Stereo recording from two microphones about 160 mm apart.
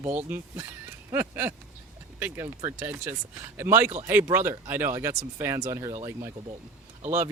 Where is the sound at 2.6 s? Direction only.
15° right (ahead or behind).